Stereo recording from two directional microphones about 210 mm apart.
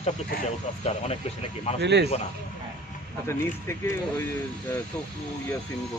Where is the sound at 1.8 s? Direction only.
55° right (ahead or behind).